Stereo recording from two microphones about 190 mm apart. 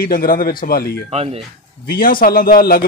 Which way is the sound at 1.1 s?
30° right (ahead or behind).